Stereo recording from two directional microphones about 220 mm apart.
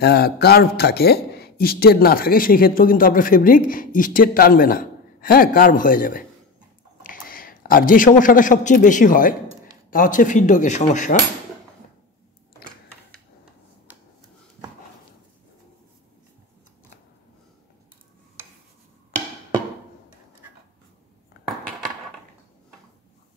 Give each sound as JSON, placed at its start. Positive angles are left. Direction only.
{"t": 0.0, "sound": "a man's voice", "side_deg": 45}